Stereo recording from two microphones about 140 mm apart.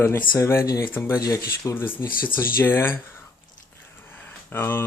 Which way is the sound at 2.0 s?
90° left.